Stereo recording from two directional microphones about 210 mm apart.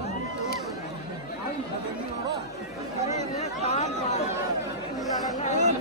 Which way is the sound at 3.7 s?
30° left (ahead or behind).